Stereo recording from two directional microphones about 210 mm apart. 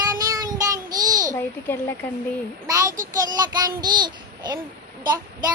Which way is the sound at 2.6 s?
15° right (ahead or behind).